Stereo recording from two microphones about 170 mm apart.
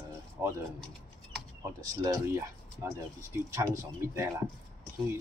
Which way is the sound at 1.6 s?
20° right (ahead or behind).